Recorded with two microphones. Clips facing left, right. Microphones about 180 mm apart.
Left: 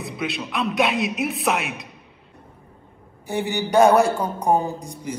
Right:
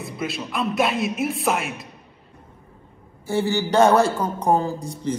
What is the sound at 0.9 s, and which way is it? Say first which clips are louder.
Music: even; 65° left (ahead or behind).